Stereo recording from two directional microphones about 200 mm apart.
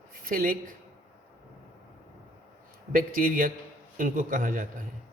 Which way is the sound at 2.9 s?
45° right (ahead or behind).